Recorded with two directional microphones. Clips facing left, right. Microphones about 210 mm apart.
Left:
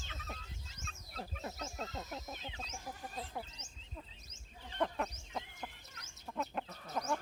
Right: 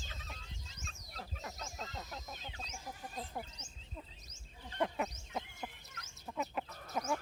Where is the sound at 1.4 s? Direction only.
30° left (ahead or behind).